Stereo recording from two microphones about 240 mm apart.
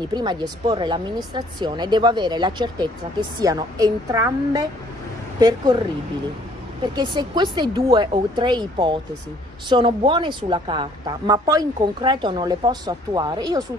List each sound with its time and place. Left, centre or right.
0.0 s speech: centre
6.8 s speech: centre